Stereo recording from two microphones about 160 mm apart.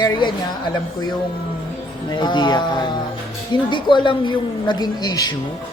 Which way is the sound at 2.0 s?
30° left (ahead or behind).